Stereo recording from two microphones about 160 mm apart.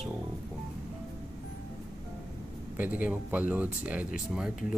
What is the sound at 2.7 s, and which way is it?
Speech, 10° right (ahead or behind).